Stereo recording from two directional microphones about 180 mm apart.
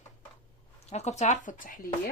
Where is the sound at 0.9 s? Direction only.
40° left (ahead or behind).